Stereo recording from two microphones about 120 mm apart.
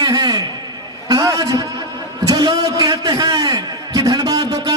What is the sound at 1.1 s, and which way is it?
A man's voice, 30° right (ahead or behind).